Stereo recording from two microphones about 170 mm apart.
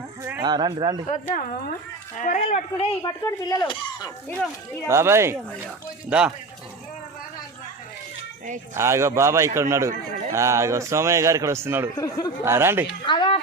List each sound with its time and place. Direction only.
0.2 s a sound: 10° right (ahead or behind)
0.4 s speech: 25° right (ahead or behind)
1.3 s speech: 60° left (ahead or behind)
2.1 s speech: 45° left (ahead or behind)
3.0 s speech: 20° left (ahead or behind)
4.9 s a man's voice: 15° right (ahead or behind)
8.7 s a man's voice: 15° right (ahead or behind)
11.9 s speech: 20° left (ahead or behind)
12.5 s a man's voice: 15° right (ahead or behind)
13.1 s speech: 30° left (ahead or behind)